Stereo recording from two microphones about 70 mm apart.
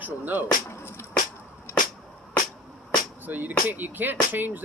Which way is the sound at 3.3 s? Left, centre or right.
Right.